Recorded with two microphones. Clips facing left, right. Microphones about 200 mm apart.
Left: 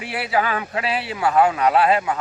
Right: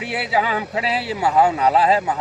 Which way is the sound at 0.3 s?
20° right (ahead or behind).